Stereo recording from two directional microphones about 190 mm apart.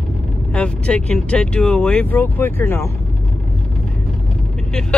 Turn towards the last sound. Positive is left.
turn(degrees=5)  # may be behind; listen again after turning